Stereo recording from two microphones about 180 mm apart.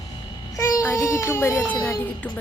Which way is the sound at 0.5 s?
20° left (ahead or behind).